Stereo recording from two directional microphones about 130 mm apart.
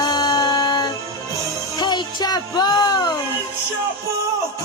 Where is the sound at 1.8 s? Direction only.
35° left (ahead or behind).